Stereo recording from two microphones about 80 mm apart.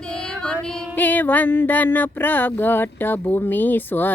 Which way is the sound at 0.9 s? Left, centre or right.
Left.